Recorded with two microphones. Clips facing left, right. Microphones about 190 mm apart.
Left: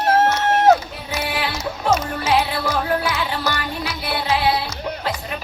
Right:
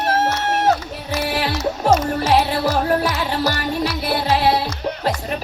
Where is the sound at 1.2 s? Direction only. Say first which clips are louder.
Right 4 dB; 40° right (ahead or behind).